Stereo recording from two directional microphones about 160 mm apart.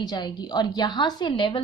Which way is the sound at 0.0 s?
25° left (ahead or behind).